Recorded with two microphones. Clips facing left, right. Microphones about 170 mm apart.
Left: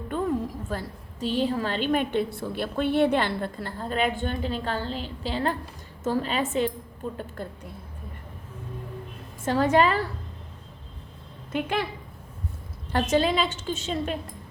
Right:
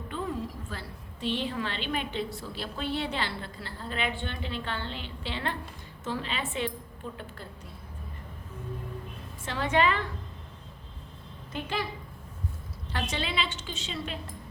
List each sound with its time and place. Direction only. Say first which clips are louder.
0.7 s a woman's voice: left 8 dB; 45° left (ahead or behind)
9.4 s a woman's voice: left 6 dB; 45° left (ahead or behind)
11.5 s a woman's voice: left 6 dB; 55° left (ahead or behind)
12.9 s a woman's voice: left 10 dB; 45° left (ahead or behind)